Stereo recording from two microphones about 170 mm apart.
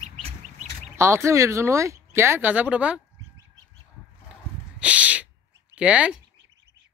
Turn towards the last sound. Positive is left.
turn(degrees=-5)  # may be behind; listen again after turning